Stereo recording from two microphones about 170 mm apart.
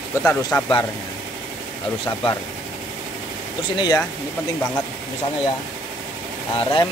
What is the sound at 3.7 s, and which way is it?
Speech, 25° left (ahead or behind).